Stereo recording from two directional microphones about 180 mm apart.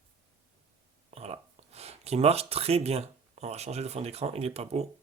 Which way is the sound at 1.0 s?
35° right (ahead or behind).